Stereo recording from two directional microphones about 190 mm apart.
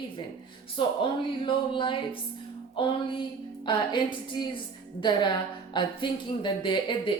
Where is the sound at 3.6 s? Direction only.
25° left (ahead or behind).